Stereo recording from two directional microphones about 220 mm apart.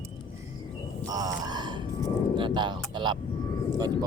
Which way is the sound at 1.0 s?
15° right (ahead or behind).